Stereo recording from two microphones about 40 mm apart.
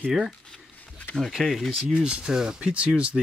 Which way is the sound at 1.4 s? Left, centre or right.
Centre.